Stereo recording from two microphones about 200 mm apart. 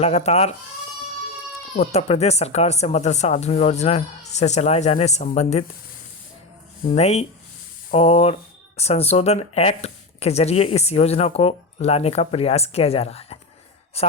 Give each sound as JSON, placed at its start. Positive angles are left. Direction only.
{"t": 0.0, "sound": "speech", "side_deg": 30}
{"t": 1.7, "sound": "speech", "side_deg": 35}
{"t": 6.8, "sound": "a woman's voice", "side_deg": 30}